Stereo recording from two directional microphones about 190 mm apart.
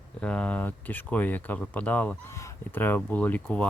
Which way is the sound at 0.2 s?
5° left (ahead or behind).